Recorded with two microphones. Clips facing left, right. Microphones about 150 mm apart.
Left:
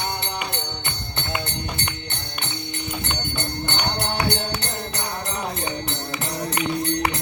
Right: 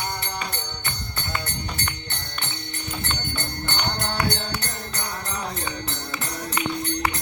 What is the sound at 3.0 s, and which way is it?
Music, 20° left (ahead or behind).